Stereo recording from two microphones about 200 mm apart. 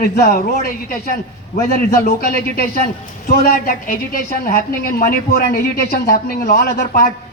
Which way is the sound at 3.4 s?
45° left (ahead or behind).